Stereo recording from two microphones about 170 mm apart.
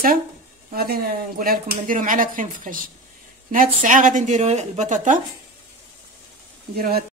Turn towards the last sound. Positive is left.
turn(degrees=-60)  # may be behind; listen again after turning